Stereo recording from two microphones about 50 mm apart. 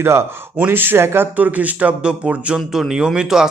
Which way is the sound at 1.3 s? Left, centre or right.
Right.